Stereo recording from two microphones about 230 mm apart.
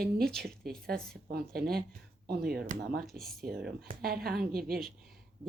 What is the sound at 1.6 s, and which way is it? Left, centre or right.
Speech, right.